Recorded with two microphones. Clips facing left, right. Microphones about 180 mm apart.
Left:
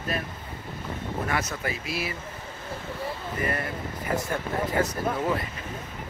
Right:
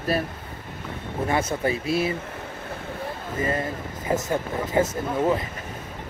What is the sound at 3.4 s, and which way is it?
Speech, 20° right (ahead or behind).